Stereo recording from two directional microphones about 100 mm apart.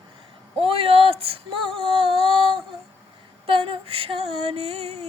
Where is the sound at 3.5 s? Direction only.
70° right (ahead or behind); by 5.0 s 90° right.